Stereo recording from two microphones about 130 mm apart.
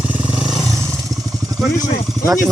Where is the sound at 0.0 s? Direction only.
10° right (ahead or behind).